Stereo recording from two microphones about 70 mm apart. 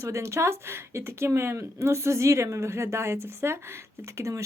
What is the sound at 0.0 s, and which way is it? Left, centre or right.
Speech, right.